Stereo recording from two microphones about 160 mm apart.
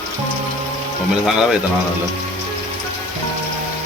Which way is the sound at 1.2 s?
Centre (ahead or behind).